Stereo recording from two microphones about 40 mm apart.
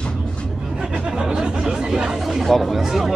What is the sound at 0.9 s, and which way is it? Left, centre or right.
Chatter, right.